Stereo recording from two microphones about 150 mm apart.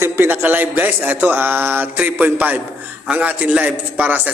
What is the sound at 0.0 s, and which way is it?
A man's voice, 15° right (ahead or behind).